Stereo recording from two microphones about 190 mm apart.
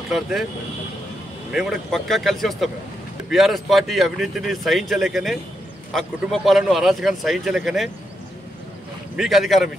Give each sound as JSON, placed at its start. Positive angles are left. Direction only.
{"t": 0.1, "sound": "speech", "side_deg": 0}
{"t": 1.5, "sound": "speech", "side_deg": 0}
{"t": 9.1, "sound": "speech", "side_deg": 0}